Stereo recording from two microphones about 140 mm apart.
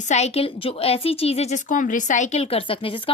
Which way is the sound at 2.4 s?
40° left (ahead or behind).